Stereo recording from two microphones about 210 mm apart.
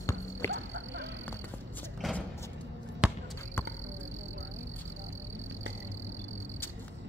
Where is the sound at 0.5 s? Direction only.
65° right (ahead or behind).